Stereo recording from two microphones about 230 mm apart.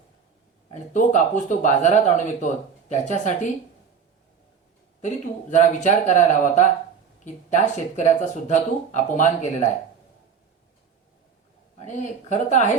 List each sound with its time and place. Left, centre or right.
0.7 s speech: left
5.0 s speech: left
12.5 s speech: left